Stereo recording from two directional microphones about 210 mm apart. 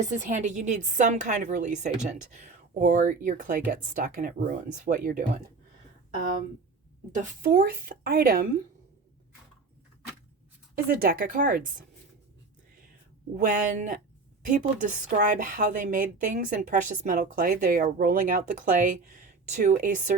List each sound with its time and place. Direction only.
0.0 s a woman's voice: 35° right (ahead or behind)
7.1 s speech: 40° right (ahead or behind)
10.8 s speech: 45° right (ahead or behind)
13.3 s a woman's voice: 35° right (ahead or behind)